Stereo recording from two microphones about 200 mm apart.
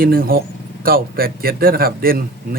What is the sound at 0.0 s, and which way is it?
A man's voice, 45° right (ahead or behind).